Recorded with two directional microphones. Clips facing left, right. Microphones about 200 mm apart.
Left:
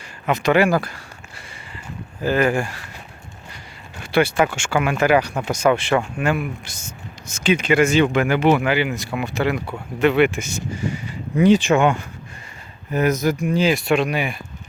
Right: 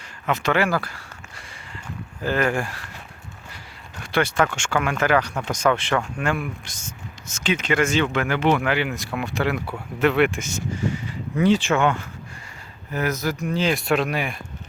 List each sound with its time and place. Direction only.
0.3 s speech: 15° left (ahead or behind)
2.2 s speech: 5° left (ahead or behind)
3.9 s speech: 10° left (ahead or behind)
13.7 s speech: centre (ahead or behind)